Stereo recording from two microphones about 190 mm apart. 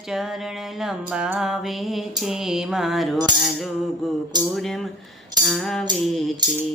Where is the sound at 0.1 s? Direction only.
Centre (ahead or behind).